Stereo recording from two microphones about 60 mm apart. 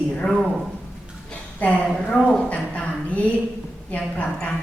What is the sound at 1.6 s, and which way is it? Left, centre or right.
Speech, left.